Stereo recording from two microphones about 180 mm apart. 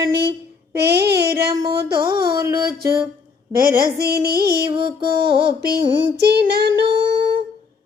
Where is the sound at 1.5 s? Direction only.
20° right (ahead or behind).